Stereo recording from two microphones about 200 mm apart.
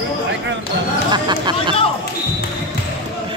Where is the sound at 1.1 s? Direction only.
20° right (ahead or behind).